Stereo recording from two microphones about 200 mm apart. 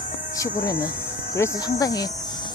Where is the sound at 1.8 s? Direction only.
20° left (ahead or behind).